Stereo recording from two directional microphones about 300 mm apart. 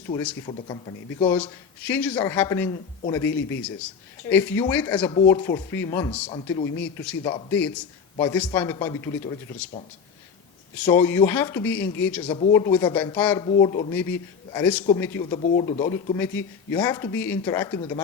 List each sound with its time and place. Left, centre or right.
0.1 s speech: centre
6.9 s speech: centre
10.8 s speech: centre
12.3 s speech: left
12.5 s speech: centre
13.4 s speech: centre